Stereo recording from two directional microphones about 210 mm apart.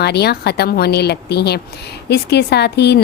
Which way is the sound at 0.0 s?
50° left (ahead or behind).